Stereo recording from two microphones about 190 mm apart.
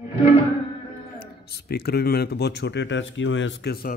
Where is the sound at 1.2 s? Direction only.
55° left (ahead or behind).